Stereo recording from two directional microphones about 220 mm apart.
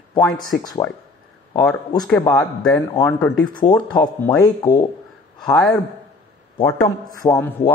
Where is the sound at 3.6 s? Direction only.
20° left (ahead or behind).